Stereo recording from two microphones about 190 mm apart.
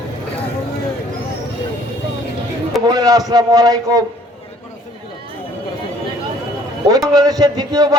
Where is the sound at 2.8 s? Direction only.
20° right (ahead or behind).